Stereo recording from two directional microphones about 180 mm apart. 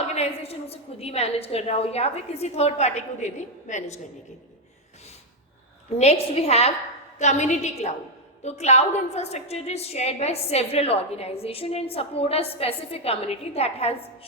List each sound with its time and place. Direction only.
0.0 s a woman's voice: 35° left (ahead or behind)
6.0 s a woman's voice: 35° left (ahead or behind)